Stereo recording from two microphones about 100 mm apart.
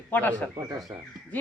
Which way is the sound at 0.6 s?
40° right (ahead or behind).